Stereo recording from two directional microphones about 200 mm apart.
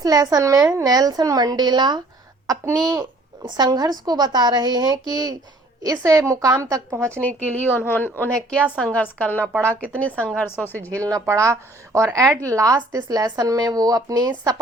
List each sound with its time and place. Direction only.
0.0 s speech: 20° right (ahead or behind)
7.2 s speech: 10° left (ahead or behind)
9.5 s speech: 10° right (ahead or behind)
9.9 s speech: 5° left (ahead or behind)
11.0 s speech: 15° right (ahead or behind)